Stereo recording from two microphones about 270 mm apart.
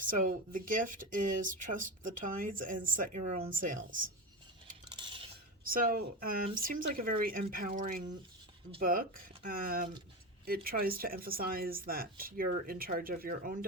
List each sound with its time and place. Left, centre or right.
0.0 s speech: right
5.6 s speech: right